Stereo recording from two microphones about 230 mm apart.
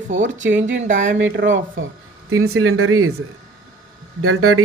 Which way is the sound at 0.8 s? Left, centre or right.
Right.